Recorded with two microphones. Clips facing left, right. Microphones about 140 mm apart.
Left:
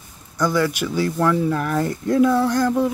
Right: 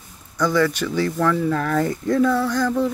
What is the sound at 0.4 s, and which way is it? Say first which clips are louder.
Speech: right 1 dB; 10° left (ahead or behind).